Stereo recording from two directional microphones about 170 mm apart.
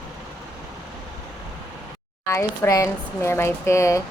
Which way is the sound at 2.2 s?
15° left (ahead or behind).